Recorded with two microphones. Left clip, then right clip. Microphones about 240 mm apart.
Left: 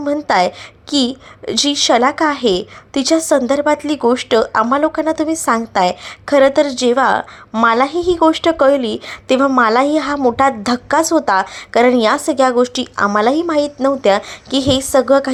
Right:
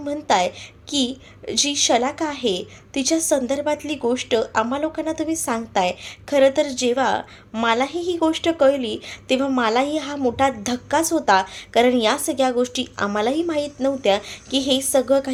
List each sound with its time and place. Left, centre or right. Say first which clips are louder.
0.0 s a woman's voice: left 6 dB; centre